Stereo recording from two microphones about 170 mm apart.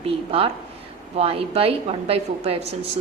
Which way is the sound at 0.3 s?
35° right (ahead or behind).